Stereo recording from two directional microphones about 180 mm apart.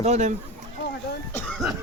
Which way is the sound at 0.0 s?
40° right (ahead or behind).